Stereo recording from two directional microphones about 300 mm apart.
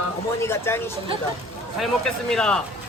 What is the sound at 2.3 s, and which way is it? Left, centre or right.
Speech, centre.